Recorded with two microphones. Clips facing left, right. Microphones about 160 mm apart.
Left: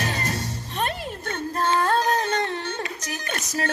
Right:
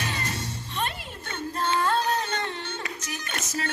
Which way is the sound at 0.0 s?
40° left (ahead or behind).